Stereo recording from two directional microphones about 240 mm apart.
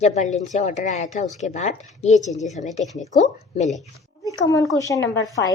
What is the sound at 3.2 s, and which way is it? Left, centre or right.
Speech, left.